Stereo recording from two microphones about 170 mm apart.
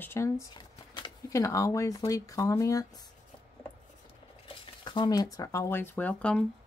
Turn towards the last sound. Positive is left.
turn(degrees=5)  # may be behind; listen again after turning